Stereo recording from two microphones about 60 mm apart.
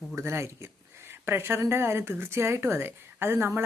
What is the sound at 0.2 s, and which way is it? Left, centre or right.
Speech, right.